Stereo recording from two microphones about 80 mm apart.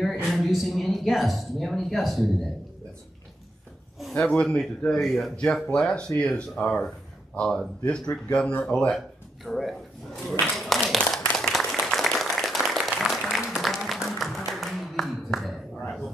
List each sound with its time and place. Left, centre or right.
0.0 s a woman's voice: centre
4.2 s a man's voice: centre
8.5 s speech: centre
8.7 s speech: centre
11.3 s applause: centre